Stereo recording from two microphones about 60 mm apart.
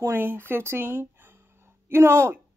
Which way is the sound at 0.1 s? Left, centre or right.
Right.